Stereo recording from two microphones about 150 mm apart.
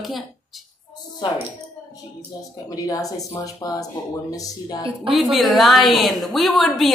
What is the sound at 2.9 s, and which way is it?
Speech, 25° left (ahead or behind).